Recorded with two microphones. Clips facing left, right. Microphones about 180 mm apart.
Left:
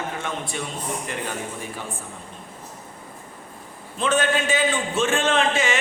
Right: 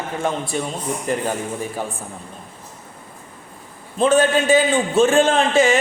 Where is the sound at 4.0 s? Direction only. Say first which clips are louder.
Right 6 dB; 35° right (ahead or behind).